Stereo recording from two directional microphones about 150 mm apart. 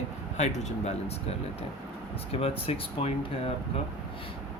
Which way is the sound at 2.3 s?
40° left (ahead or behind).